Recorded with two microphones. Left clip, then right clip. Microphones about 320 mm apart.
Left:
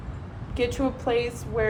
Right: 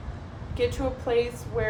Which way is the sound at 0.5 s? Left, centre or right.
Left.